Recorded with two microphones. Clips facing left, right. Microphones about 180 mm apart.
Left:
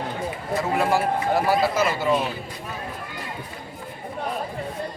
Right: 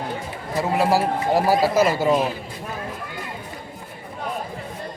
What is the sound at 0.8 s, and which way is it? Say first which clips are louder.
A man's voice: right 3 dB; 35° right (ahead or behind).